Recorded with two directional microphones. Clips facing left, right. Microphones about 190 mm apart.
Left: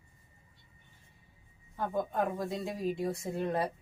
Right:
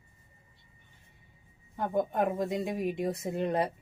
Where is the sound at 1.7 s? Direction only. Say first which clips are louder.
Right 3 dB; 20° right (ahead or behind).